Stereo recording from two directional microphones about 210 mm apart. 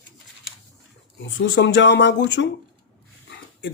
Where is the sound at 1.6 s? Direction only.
60° left (ahead or behind).